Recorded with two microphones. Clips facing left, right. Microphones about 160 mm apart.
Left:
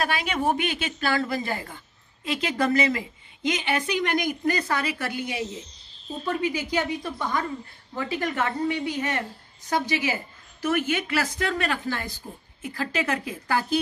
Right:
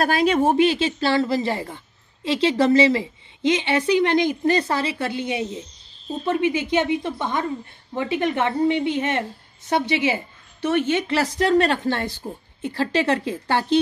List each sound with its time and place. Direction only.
0.0 s a woman's voice: 35° right (ahead or behind)